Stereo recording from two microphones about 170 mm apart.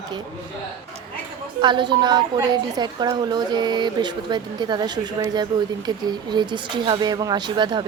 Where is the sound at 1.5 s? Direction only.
25° right (ahead or behind).